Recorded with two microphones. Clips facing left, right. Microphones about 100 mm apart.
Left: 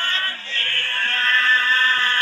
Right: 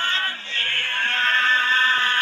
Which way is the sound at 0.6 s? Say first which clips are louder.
Left 1 dB; 15° right (ahead or behind).